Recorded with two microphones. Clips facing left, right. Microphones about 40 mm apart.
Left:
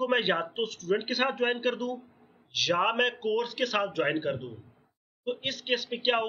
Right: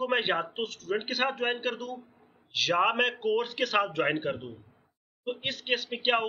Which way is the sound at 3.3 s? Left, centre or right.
Centre.